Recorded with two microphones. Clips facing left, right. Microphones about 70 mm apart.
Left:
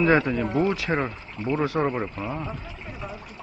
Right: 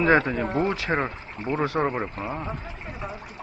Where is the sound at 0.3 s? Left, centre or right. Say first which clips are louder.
Left 1 dB; right.